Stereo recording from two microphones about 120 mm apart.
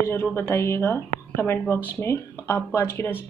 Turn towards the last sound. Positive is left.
turn(degrees=20)  # may be behind; listen again after turning